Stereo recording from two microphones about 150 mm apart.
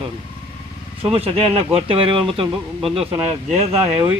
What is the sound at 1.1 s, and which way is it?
Speech, 40° right (ahead or behind).